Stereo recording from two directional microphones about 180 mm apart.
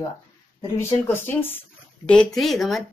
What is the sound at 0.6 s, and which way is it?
Speech, 15° left (ahead or behind).